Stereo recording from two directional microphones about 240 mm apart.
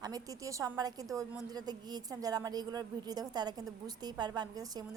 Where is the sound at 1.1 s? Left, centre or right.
Centre.